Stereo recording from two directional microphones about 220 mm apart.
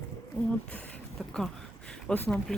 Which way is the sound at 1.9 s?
5° left (ahead or behind).